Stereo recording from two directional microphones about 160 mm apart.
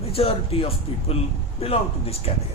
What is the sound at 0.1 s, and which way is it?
Speech, 35° left (ahead or behind).